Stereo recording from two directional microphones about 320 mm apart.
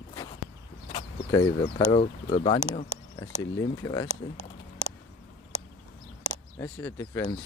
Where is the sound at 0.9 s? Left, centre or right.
Centre.